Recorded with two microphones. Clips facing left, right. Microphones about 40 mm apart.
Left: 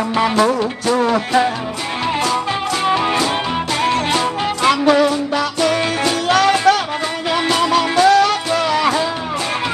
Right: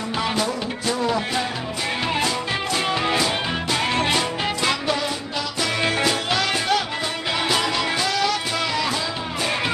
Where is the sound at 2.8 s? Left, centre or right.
Centre.